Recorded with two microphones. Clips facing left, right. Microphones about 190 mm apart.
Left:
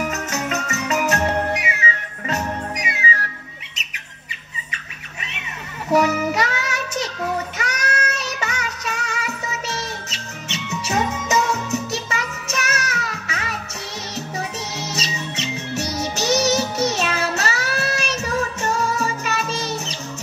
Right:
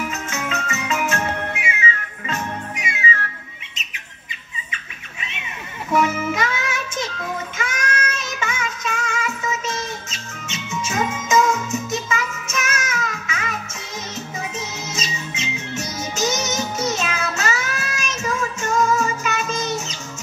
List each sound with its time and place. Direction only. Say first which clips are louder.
0.0 s music: left 2 dB; 40° left (ahead or behind)
5.9 s child singing: left 2 dB; 40° left (ahead or behind)
8.4 s music: right 1 dB; 40° left (ahead or behind)
10.0 s music: left 1 dB; 65° left (ahead or behind)
10.9 s music: even; 35° left (ahead or behind)
14.9 s music: left 2 dB; 35° left (ahead or behind)
16.9 s child singing: left 2 dB; 35° left (ahead or behind)